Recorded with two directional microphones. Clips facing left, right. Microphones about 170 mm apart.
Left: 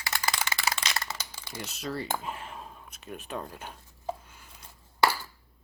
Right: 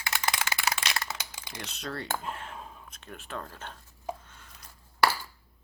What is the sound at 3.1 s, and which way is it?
Speech, 15° left (ahead or behind).